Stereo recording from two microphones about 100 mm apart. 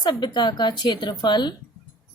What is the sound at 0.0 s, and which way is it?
A woman's voice, 45° left (ahead or behind).